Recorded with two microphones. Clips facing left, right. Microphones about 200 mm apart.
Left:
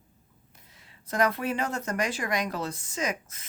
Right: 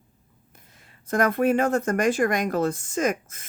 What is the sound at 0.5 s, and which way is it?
Speech, 50° right (ahead or behind).